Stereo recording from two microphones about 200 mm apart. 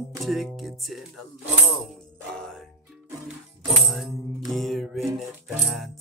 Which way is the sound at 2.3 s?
5° left (ahead or behind).